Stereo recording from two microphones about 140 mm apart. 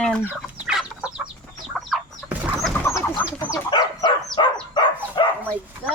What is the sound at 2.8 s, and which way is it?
Chicken, 15° left (ahead or behind).